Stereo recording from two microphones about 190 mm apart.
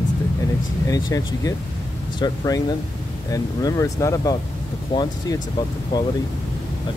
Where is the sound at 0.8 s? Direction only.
20° left (ahead or behind).